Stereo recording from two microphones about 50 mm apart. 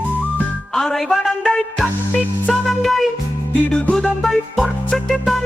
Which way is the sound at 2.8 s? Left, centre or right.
Centre.